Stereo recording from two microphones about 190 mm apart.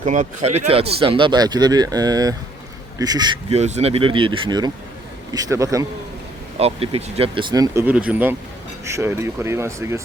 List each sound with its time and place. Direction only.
0.0 s speech: 40° right (ahead or behind); by 3.3 s 20° right (ahead or behind)
3.5 s speech: 35° right (ahead or behind); by 5.8 s 15° right (ahead or behind)
6.6 s speech: 30° right (ahead or behind)
7.5 s speech: 20° right (ahead or behind)
7.9 s speech: 10° right (ahead or behind)